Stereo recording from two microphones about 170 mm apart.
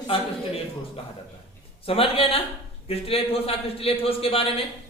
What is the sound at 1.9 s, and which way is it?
A man's voice, 35° left (ahead or behind).